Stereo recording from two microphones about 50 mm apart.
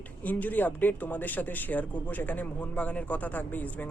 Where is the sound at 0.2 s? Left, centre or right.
Left.